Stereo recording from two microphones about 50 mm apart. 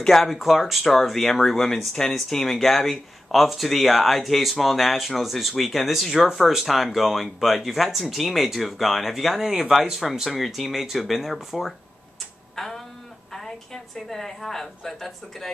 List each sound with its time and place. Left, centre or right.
0.0 s speech: centre
12.5 s a sound: centre
13.9 s speech: centre